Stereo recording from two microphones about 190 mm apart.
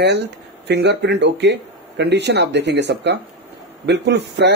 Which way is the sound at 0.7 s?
65° right (ahead or behind).